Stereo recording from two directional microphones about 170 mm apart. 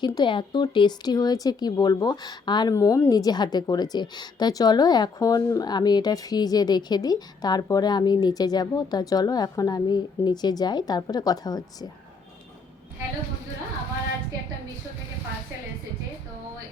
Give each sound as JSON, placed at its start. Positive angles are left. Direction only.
{"t": 0.0, "sound": "speech", "side_deg": 25}